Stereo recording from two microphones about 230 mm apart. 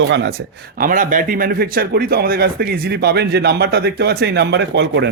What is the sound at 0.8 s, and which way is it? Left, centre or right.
Speech, right.